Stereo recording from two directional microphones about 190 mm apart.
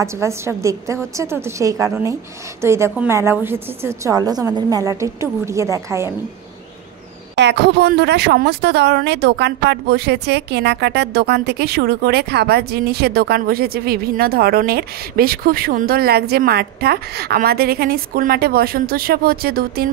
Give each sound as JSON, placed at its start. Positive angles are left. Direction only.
{"t": 0.0, "sound": "a woman's voice", "side_deg": -15}
{"t": 7.3, "sound": "speech", "side_deg": -65}